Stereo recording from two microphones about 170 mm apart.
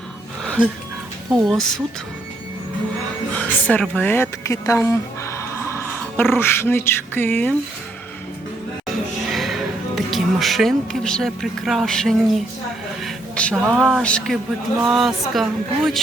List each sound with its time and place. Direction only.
0.4 s music: 5° left (ahead or behind)
1.5 s a woman's voice: 5° left (ahead or behind)
3.3 s a sound: 10° left (ahead or behind)
6.3 s speech: 15° left (ahead or behind)
9.3 s a woman's voice: centre (ahead or behind)